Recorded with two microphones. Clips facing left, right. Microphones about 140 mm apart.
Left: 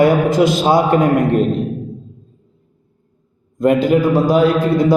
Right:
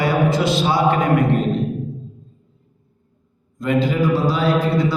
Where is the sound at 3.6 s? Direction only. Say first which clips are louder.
Left 6 dB; 50° left (ahead or behind).